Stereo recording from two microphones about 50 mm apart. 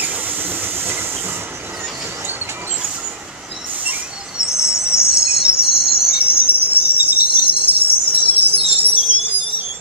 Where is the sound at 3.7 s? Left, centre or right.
Right.